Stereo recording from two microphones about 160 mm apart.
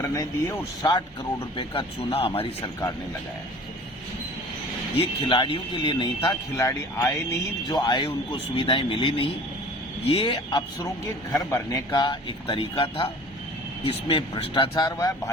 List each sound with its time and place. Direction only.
0.0 s speech: 20° left (ahead or behind); by 2.5 s 35° left (ahead or behind)
4.9 s speech: 35° left (ahead or behind)
6.6 s speech: 15° left (ahead or behind)
7.7 s speech: 30° left (ahead or behind)
11.3 s speech: 20° left (ahead or behind)